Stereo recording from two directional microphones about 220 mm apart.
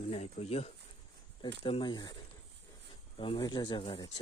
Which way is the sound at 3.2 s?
20° left (ahead or behind).